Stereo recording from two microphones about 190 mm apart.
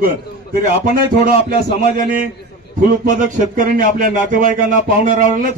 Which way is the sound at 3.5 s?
45° right (ahead or behind).